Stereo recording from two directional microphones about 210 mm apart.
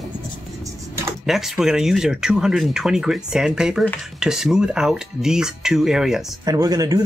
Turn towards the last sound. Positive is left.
turn(degrees=-15)  # may be behind; listen again after turning